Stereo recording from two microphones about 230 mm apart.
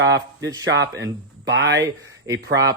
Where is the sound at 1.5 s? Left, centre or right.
Right.